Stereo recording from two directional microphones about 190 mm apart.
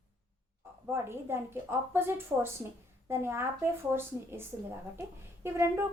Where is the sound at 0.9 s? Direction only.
15° right (ahead or behind).